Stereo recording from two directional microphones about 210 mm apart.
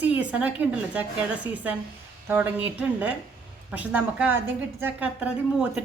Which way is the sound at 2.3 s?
5° right (ahead or behind).